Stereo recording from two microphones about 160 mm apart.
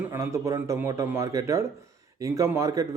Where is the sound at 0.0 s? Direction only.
15° right (ahead or behind).